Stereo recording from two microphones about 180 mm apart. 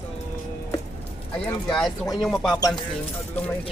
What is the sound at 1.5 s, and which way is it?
Speech, 5° left (ahead or behind).